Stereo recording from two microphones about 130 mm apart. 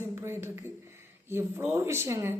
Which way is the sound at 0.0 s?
20° right (ahead or behind).